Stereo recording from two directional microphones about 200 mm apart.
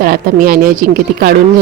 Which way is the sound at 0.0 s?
45° right (ahead or behind).